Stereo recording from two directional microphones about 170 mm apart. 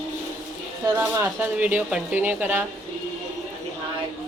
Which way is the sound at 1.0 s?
15° right (ahead or behind).